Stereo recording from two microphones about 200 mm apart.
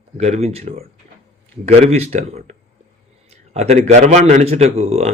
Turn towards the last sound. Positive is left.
turn(degrees=-30)  # may be behind; listen again after turning